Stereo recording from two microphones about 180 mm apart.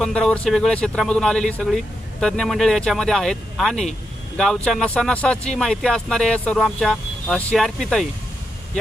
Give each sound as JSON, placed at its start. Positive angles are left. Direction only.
{"t": 0.0, "sound": "speech", "side_deg": 5}